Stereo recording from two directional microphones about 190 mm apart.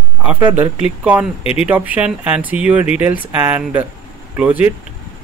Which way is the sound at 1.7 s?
10° right (ahead or behind).